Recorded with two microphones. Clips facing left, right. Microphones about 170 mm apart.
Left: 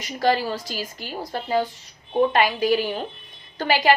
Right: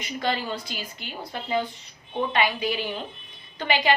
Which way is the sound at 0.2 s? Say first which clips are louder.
Left 7 dB; 40° left (ahead or behind).